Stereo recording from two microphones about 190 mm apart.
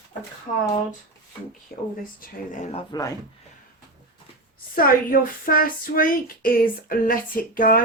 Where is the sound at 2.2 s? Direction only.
40° left (ahead or behind).